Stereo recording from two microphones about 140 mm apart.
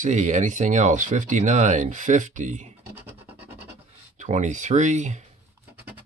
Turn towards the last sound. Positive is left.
turn(degrees=-60)  # may be behind; listen again after turning